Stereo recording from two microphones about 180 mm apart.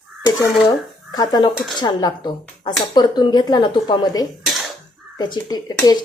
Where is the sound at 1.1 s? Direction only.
20° left (ahead or behind).